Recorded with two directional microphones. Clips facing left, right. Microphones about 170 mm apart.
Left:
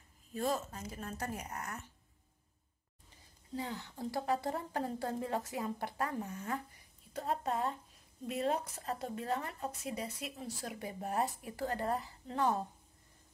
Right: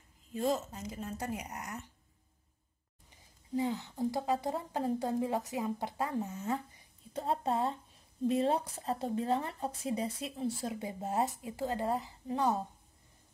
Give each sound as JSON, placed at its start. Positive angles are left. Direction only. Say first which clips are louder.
{"t": 0.3, "sound": "a woman's voice", "louder": "right 3 dB", "side_deg": -20}
{"t": 3.5, "sound": "a woman's voice", "louder": "right 7 dB", "side_deg": -15}